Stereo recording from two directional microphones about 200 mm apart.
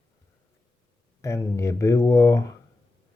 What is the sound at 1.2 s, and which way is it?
Speech, 15° left (ahead or behind).